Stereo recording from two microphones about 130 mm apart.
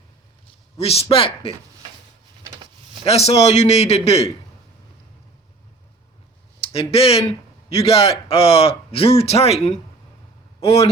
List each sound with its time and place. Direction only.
0.8 s a man's voice: 50° left (ahead or behind)
3.0 s a man's voice: 50° left (ahead or behind)
6.6 s a man's voice: 50° left (ahead or behind)